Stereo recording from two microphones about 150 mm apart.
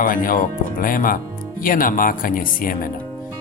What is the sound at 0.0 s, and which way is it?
Speech, 65° left (ahead or behind).